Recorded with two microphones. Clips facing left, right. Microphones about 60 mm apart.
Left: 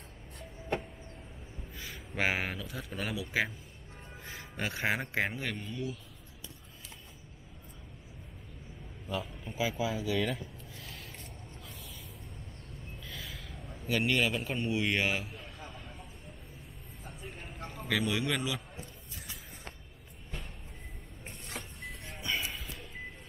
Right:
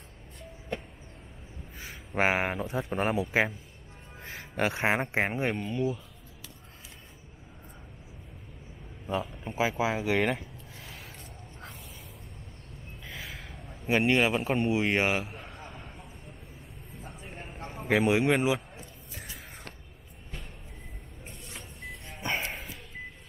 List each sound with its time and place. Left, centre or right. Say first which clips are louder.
1.8 s speech: right 5 dB; right
9.1 s a man's voice: right 5 dB; right
9.9 s speech: right 5 dB; right
13.0 s a sound: right 5 dB; right
13.8 s a man's voice: right 5 dB; right
15.6 s a sound: right 2 dB; right
17.5 s a sound: right 3 dB; centre
17.7 s speech: right 7 dB; right
21.5 s vehicle: even; centre
22.4 s music: right 3 dB; right